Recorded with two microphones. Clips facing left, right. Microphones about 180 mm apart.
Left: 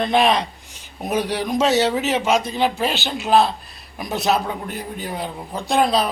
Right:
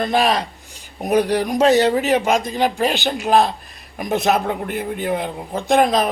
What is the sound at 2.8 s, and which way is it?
Speech, 15° right (ahead or behind).